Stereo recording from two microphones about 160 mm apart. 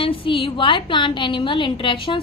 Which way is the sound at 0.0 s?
35° left (ahead or behind).